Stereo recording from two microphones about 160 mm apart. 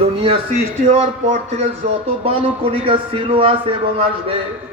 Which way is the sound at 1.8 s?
45° right (ahead or behind).